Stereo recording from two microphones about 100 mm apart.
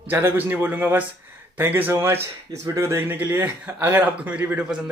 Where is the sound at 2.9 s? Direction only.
20° right (ahead or behind).